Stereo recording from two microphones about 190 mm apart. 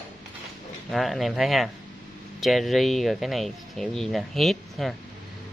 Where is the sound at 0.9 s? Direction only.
Centre (ahead or behind).